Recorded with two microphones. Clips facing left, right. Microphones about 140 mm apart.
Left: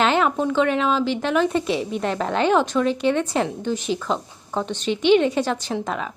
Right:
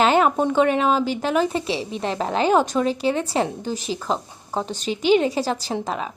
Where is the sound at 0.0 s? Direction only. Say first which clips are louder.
Right 2 dB; 40° right (ahead or behind).